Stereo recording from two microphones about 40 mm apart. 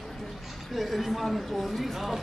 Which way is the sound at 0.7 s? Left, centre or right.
Centre.